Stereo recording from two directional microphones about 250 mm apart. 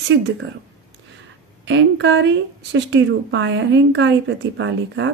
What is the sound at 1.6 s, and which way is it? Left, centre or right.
Speech, right.